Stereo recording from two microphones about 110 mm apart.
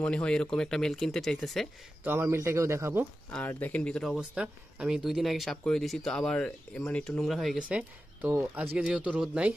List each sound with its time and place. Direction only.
0.0 s speech: 10° left (ahead or behind)
2.0 s speech: 20° right (ahead or behind)
3.3 s speech: 15° left (ahead or behind)
4.2 s speech: 10° right (ahead or behind)
7.6 s speech: 15° right (ahead or behind)